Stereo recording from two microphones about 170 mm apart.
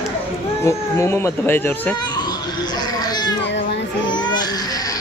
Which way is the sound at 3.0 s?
25° left (ahead or behind).